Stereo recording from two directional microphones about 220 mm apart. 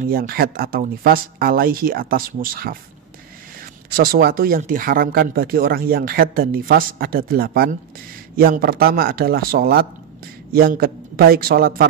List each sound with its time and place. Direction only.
0.0 s speech: 40° right (ahead or behind)
3.9 s speech: 45° right (ahead or behind)